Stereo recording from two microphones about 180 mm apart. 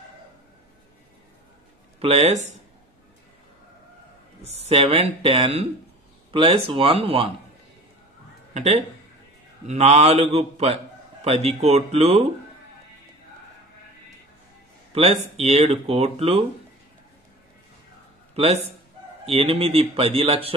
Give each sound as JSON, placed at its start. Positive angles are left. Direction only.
{"t": 2.0, "sound": "speech", "side_deg": -35}
{"t": 4.5, "sound": "speech", "side_deg": -35}
{"t": 8.5, "sound": "speech", "side_deg": -40}
{"t": 14.9, "sound": "speech", "side_deg": -35}
{"t": 18.3, "sound": "a man's voice", "side_deg": -35}